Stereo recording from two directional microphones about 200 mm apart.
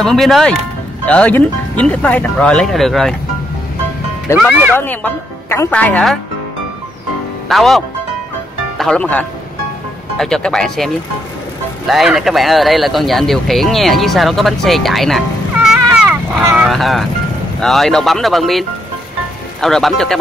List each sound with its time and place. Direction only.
0.0 s speech: centre (ahead or behind)
4.4 s speech: 10° right (ahead or behind)
4.7 s speech: 10° left (ahead or behind)
7.4 s speech: centre (ahead or behind)